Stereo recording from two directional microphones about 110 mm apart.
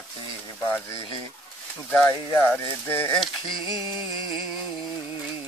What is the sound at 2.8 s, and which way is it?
Speech, 20° left (ahead or behind).